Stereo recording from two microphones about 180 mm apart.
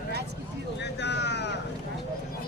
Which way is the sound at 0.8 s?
70° left (ahead or behind).